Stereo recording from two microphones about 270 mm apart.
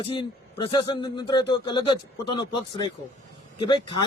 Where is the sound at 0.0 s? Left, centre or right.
Centre.